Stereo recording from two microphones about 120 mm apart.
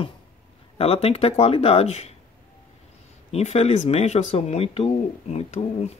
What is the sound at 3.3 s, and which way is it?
Speech, 65° left (ahead or behind).